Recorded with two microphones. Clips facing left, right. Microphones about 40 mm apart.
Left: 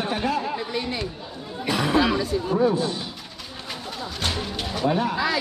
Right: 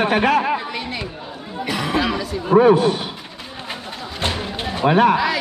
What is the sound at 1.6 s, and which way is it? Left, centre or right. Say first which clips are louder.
Chatter: even; right.